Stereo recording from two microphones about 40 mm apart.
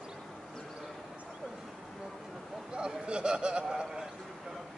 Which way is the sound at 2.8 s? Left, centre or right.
Right.